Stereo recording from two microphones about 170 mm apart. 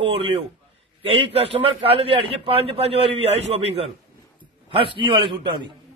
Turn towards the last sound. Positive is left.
turn(degrees=-30)  # may be behind; listen again after turning